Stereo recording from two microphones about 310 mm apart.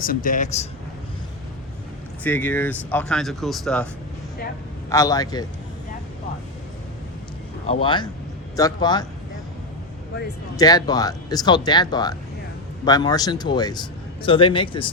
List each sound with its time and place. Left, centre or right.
0.0 s speech: left
2.2 s speech: centre
4.9 s a man's voice: centre
7.7 s a man's voice: centre
10.6 s a man's voice: centre